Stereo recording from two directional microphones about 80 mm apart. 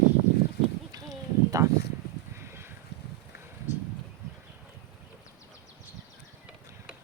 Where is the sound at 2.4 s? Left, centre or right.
Right.